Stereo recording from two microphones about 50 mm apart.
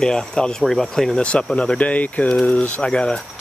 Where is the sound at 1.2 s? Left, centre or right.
Left.